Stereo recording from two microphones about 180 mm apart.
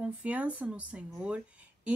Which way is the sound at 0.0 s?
10° right (ahead or behind).